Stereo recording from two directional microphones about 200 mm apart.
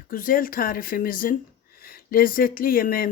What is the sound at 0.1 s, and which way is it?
Speech, 45° left (ahead or behind).